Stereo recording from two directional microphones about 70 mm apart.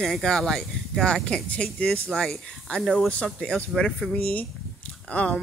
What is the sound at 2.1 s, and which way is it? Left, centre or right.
Speech, centre.